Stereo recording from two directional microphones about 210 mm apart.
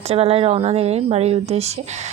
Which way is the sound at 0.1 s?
30° right (ahead or behind).